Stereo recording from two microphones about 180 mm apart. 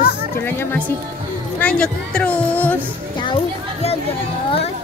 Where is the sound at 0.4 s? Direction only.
10° left (ahead or behind).